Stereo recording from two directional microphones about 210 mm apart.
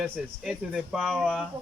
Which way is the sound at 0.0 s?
5° right (ahead or behind).